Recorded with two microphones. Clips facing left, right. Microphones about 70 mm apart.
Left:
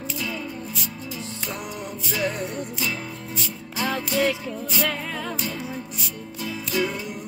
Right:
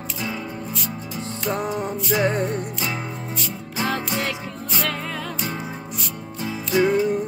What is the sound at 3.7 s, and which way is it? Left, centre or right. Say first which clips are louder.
Music: even; right.